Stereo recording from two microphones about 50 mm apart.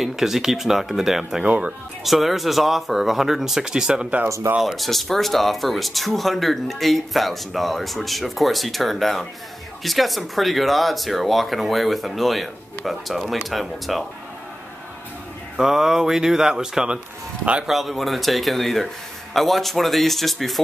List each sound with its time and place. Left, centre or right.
0.0 s speech: centre
1.4 s speech: right
2.0 s speech: centre
4.8 s speech: centre
15.5 s speech: centre